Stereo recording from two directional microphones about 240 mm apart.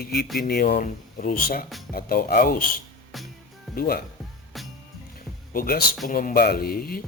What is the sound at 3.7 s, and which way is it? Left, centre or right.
Speech, left.